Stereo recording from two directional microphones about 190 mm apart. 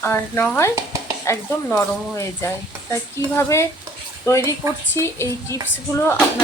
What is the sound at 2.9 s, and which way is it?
Speech, 15° left (ahead or behind).